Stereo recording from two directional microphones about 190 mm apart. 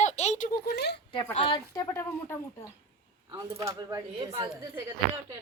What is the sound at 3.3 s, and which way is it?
Speech, 20° right (ahead or behind).